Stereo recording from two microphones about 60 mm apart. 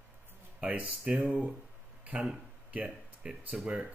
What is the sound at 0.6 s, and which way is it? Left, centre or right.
Speech, centre.